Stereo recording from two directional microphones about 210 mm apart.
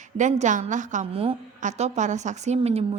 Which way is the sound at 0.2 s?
35° right (ahead or behind).